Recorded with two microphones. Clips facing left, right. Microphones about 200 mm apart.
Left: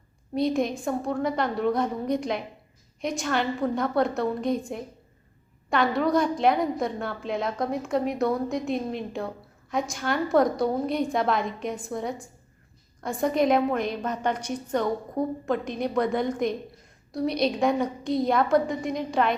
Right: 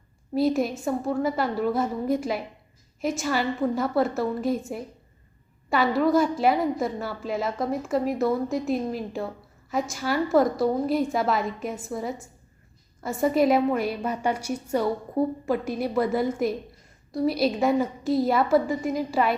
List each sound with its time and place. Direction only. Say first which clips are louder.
0.3 s a woman's voice: right 2 dB; 5° right (ahead or behind)